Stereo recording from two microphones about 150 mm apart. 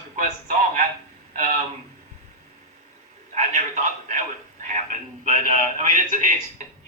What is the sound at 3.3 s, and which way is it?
A man's voice, 55° right (ahead or behind).